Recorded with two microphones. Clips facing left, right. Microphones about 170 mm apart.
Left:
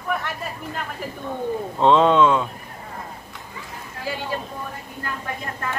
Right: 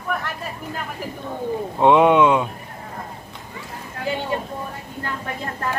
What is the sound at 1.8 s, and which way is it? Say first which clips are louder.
Speech: right 2 dB; 15° right (ahead or behind).